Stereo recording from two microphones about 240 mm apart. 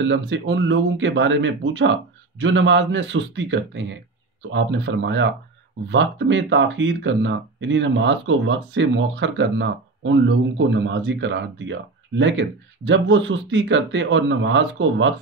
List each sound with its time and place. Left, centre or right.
0.0 s speech: right